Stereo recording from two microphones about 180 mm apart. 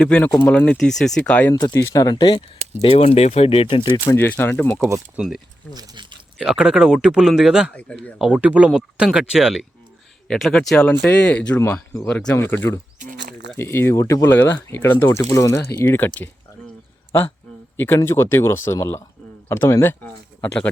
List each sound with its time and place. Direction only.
0.0 s speech: 5° left (ahead or behind)
1.5 s speech: 15° left (ahead or behind)
4.1 s speech: 10° left (ahead or behind)
5.7 s speech: 25° right (ahead or behind)
6.4 s speech: 5° right (ahead or behind)
7.8 s speech: 10° left (ahead or behind)
8.2 s speech: 5° right (ahead or behind); by 12.5 s 10° left (ahead or behind)
13.6 s speech: 15° left (ahead or behind)